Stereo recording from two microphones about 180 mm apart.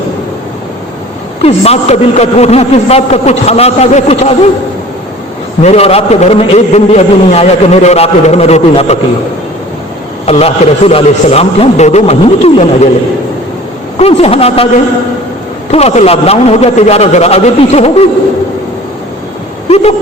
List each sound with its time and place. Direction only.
1.4 s a man's voice: 35° left (ahead or behind)
5.6 s a man's voice: 35° left (ahead or behind)
10.2 s a man's voice: 35° left (ahead or behind)
14.0 s a man's voice: 35° left (ahead or behind)
15.7 s a man's voice: 35° left (ahead or behind)
19.6 s a sound: 35° left (ahead or behind)